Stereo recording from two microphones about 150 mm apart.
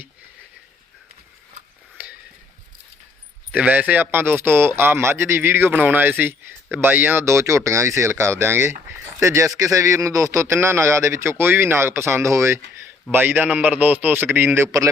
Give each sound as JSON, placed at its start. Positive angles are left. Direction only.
{"t": 3.5, "sound": "speech", "side_deg": -10}